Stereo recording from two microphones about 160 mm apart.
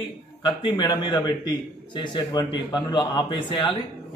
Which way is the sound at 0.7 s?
30° left (ahead or behind).